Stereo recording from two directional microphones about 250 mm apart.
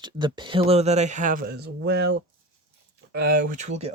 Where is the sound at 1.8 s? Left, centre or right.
Right.